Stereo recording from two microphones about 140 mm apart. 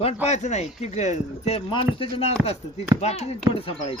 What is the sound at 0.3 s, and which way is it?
Speech, 55° left (ahead or behind).